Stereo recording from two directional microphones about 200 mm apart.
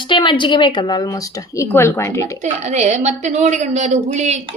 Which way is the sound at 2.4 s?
35° right (ahead or behind).